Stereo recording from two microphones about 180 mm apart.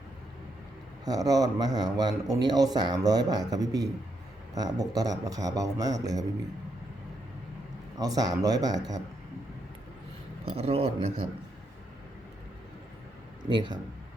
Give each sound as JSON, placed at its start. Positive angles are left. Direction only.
{"t": 1.0, "sound": "a man's voice", "side_deg": -20}
{"t": 7.9, "sound": "a man's voice", "side_deg": -20}
{"t": 10.4, "sound": "speech", "side_deg": -30}
{"t": 13.4, "sound": "a man's voice", "side_deg": -25}